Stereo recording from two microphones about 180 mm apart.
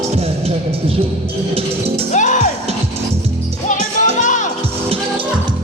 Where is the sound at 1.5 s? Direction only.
35° right (ahead or behind).